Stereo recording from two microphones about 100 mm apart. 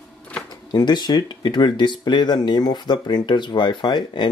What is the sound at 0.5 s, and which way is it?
Speech, 45° left (ahead or behind).